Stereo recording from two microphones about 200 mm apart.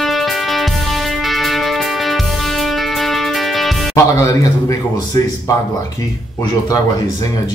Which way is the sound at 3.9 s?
15° left (ahead or behind).